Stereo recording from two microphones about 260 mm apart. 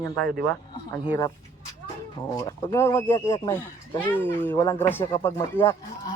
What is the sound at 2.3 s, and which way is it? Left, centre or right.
Speech, centre.